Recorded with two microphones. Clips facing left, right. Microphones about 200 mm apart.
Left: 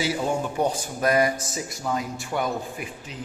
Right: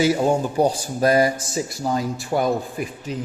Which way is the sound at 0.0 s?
40° right (ahead or behind).